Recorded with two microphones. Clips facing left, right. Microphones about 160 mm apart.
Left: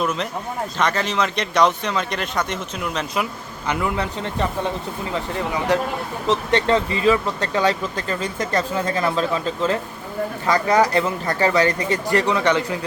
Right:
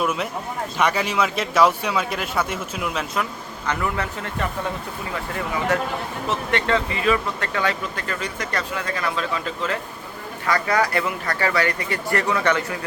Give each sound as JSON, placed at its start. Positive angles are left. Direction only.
{"t": 0.0, "sound": "a man's voice", "side_deg": -10}
{"t": 3.7, "sound": "speech", "side_deg": 15}
{"t": 6.2, "sound": "speech", "side_deg": 30}
{"t": 10.4, "sound": "speech", "side_deg": 20}